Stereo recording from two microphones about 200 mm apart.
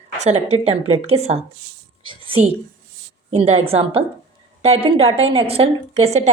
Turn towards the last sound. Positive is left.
turn(degrees=-35)  # may be behind; listen again after turning